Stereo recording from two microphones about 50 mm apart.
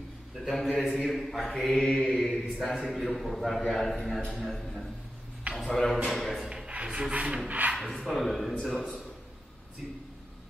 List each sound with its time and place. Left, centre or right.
0.5 s mantra: centre
4.3 s a man's voice: centre
5.5 s a sound: centre
6.0 s mantra: centre
6.7 s rub: right
7.4 s speech: right
7.7 s mantra: centre